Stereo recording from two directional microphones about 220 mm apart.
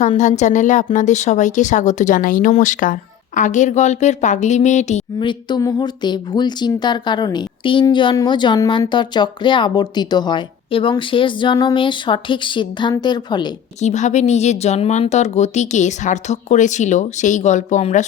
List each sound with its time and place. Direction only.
0.0 s speech: 35° left (ahead or behind)
13.8 s speech: 30° left (ahead or behind)